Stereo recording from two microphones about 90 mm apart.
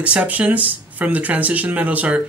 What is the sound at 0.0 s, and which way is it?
Speech, 15° right (ahead or behind).